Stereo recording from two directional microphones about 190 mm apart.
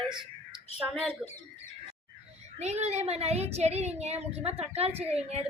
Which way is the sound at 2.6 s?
35° right (ahead or behind).